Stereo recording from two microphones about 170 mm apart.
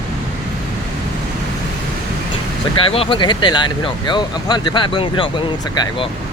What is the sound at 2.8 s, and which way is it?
Speech, 30° left (ahead or behind).